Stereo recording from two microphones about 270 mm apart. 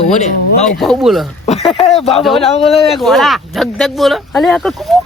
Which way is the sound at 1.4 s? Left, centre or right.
Left.